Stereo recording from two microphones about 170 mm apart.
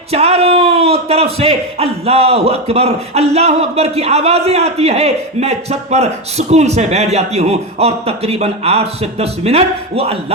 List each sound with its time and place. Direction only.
0.1 s a man's voice: 35° right (ahead or behind)